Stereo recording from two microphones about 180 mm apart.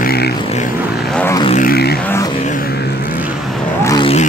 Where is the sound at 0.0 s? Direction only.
60° left (ahead or behind).